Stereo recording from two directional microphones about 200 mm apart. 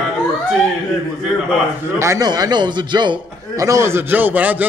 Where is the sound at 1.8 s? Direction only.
15° right (ahead or behind).